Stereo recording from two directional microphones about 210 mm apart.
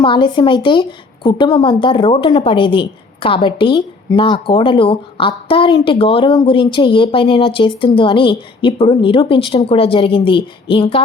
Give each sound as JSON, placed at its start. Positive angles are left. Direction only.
{"t": 0.0, "sound": "a woman's voice", "side_deg": 25}